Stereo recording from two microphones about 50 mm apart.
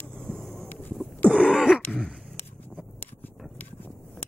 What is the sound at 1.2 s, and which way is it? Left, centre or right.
Throat clearing, left.